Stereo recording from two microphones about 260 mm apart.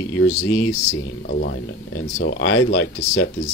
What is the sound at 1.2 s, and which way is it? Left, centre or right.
Speech, left.